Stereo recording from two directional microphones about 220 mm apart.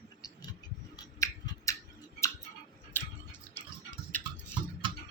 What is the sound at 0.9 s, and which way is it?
Scissors, 15° left (ahead or behind).